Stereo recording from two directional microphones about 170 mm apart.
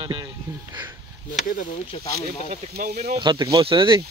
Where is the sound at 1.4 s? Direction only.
55° left (ahead or behind).